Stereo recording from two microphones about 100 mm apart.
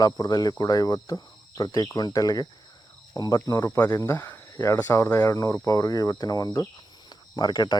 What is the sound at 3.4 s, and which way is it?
Speech, 35° left (ahead or behind).